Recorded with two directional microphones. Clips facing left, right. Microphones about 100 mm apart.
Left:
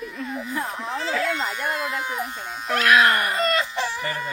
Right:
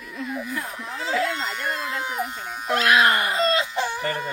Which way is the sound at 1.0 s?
15° right (ahead or behind).